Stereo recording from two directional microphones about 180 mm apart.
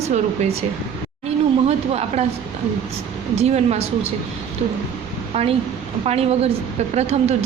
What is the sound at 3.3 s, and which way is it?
Speech, 35° right (ahead or behind).